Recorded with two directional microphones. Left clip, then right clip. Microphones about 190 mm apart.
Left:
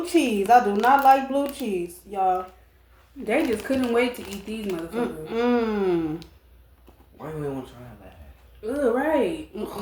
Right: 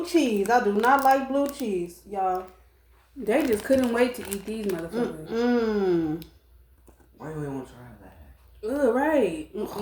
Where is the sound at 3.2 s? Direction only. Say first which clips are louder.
Even; 20° right (ahead or behind).